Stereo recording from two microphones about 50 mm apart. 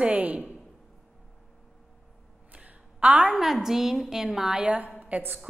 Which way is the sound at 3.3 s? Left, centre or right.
Centre.